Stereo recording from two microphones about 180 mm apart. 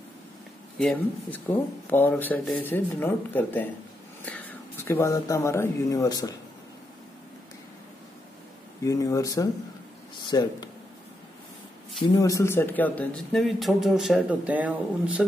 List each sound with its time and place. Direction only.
0.7 s speech: 5° left (ahead or behind)
8.8 s speech: 20° left (ahead or behind)
12.1 s speech: 20° left (ahead or behind); by 15.2 s 5° right (ahead or behind)